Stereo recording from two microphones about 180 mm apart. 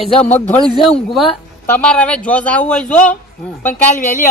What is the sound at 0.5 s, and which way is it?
A man's voice, centre (ahead or behind).